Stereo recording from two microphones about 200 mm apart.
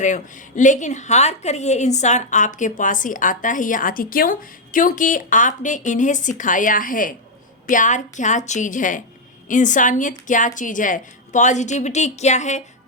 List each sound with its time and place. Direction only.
0.0 s a woman's voice: 40° left (ahead or behind)